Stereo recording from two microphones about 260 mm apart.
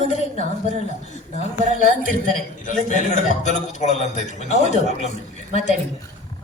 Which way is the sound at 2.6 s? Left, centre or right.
Left.